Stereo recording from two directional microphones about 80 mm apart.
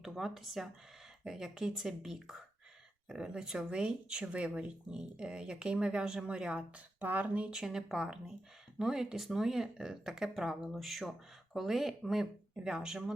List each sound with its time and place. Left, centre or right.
0.0 s speech: centre